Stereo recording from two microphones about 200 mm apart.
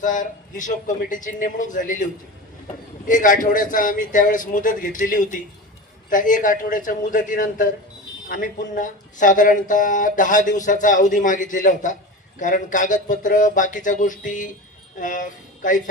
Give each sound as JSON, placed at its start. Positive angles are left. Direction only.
{"t": 0.0, "sound": "speech", "side_deg": 40}
{"t": 3.1, "sound": "speech", "side_deg": 40}